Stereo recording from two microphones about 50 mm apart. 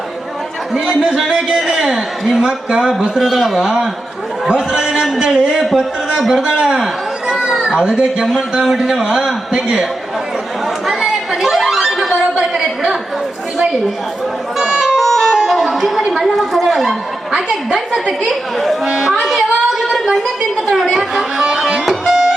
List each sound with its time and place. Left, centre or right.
1.0 s speech: centre
3.2 s speech: centre
4.4 s a man's voice: centre
10.8 s a sound: centre
14.6 s music: centre
15.0 s music: centre
18.3 s speech: centre
18.9 s speech: centre
21.8 s music: centre